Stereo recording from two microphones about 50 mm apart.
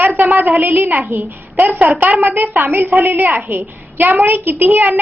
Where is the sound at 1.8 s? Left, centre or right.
Right.